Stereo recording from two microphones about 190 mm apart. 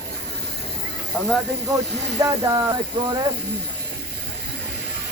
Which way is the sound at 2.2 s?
15° right (ahead or behind).